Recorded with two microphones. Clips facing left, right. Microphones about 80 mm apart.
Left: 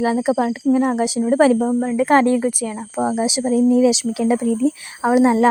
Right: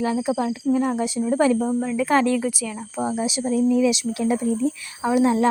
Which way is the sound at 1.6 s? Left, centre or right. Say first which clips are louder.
Left 5 dB; left.